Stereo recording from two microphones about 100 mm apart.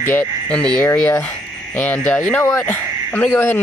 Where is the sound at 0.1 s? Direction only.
15° left (ahead or behind).